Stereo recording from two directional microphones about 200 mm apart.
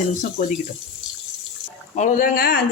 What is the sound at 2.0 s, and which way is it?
Speech, 40° left (ahead or behind).